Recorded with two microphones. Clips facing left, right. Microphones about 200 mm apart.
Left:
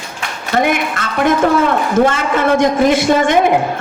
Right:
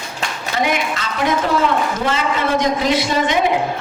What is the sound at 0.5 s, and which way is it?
A man's voice, 55° left (ahead or behind).